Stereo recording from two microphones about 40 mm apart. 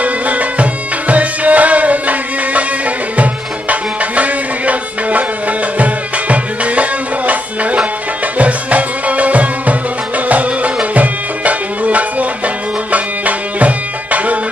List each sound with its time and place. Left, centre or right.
0.0 s music: right